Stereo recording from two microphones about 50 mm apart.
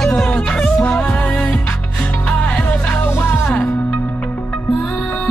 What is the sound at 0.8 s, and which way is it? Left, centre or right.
Music, left.